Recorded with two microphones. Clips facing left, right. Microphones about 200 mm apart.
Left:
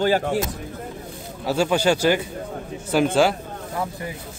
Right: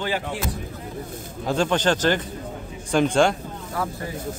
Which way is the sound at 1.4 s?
10° left (ahead or behind).